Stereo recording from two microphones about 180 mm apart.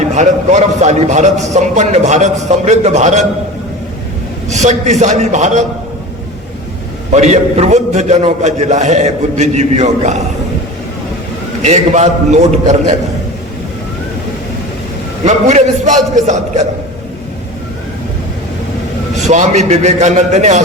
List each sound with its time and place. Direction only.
0.1 s a man's voice: 40° right (ahead or behind)
4.4 s a man's voice: 40° right (ahead or behind)
7.1 s a man's voice: 40° right (ahead or behind)
11.6 s a man's voice: 40° right (ahead or behind)
15.2 s a man's voice: 40° right (ahead or behind)
19.2 s a man's voice: 40° right (ahead or behind)